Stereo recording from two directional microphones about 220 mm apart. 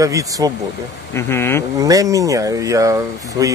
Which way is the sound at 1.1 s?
10° left (ahead or behind).